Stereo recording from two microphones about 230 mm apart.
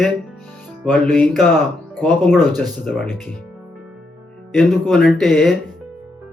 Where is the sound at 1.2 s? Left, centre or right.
Centre.